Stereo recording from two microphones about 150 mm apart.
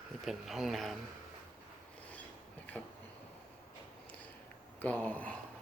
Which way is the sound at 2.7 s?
10° left (ahead or behind).